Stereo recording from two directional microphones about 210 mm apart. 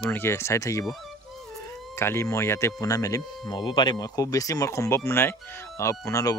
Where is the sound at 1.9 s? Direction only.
10° left (ahead or behind).